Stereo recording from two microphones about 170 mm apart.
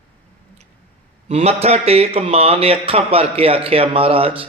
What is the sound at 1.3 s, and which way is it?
Speech, 35° right (ahead or behind).